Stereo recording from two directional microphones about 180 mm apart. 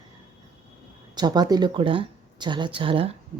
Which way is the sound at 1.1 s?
25° right (ahead or behind).